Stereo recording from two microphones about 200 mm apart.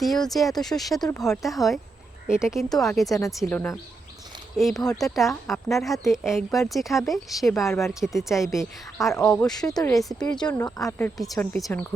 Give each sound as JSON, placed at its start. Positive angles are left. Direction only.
{"t": 0.0, "sound": "speech", "side_deg": 0}
{"t": 9.3, "sound": "speech", "side_deg": 15}
{"t": 10.0, "sound": "speech", "side_deg": 0}
{"t": 10.5, "sound": "speech", "side_deg": 15}